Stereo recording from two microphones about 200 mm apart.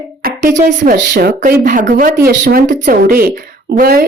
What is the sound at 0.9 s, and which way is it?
Speech, 55° right (ahead or behind).